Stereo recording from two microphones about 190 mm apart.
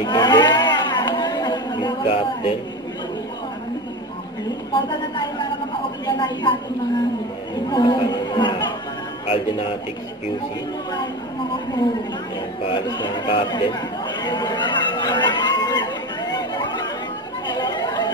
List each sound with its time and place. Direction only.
0.0 s a sound: 25° left (ahead or behind)
4.7 s speech: 25° left (ahead or behind)
7.7 s speech: 25° left (ahead or behind)
12.6 s chatter: 25° left (ahead or behind)